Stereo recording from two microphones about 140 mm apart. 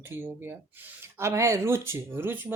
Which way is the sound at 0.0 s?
15° right (ahead or behind).